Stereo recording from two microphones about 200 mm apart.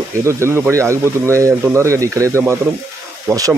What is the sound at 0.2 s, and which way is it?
Speech, 15° right (ahead or behind).